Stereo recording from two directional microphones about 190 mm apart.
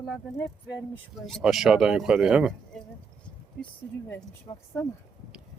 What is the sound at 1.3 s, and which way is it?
Speech, centre (ahead or behind).